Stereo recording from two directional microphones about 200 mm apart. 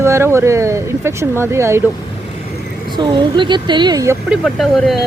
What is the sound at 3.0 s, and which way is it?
Speech, 25° right (ahead or behind).